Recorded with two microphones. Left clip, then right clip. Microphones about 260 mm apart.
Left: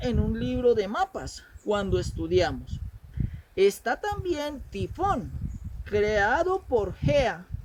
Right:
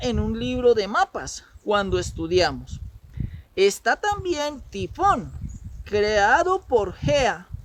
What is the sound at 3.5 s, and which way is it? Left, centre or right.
Speech, right.